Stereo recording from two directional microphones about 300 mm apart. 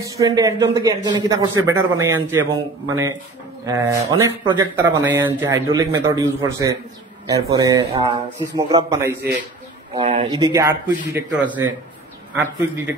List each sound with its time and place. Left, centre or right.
0.0 s speech: centre
3.6 s speech: centre